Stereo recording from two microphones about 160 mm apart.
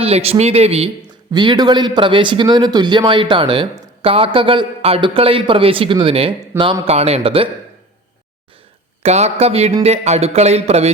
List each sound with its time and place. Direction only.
0.0 s speech: 40° right (ahead or behind)
1.3 s speech: 25° right (ahead or behind)
9.0 s speech: 45° right (ahead or behind)